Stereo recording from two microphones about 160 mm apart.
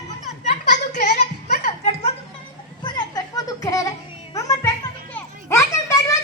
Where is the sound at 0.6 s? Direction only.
50° left (ahead or behind).